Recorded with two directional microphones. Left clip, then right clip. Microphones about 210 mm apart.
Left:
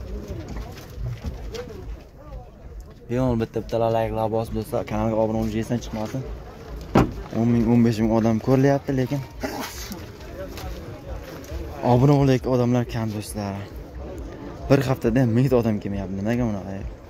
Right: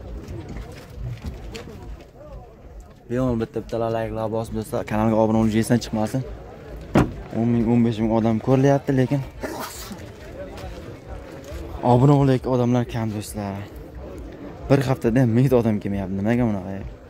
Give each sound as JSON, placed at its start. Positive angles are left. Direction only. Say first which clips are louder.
{"t": 3.1, "sound": "speech", "louder": "even", "side_deg": 5}
{"t": 5.0, "sound": "speech", "louder": "right 5 dB", "side_deg": -30}
{"t": 7.3, "sound": "speech", "louder": "even", "side_deg": 0}
{"t": 11.8, "sound": "a man's voice", "louder": "right 1 dB", "side_deg": -10}
{"t": 14.7, "sound": "a man's voice", "louder": "even", "side_deg": -10}